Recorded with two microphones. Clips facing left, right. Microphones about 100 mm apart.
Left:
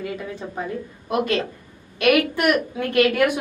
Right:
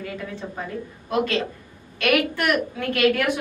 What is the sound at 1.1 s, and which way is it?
A woman's voice, 15° left (ahead or behind).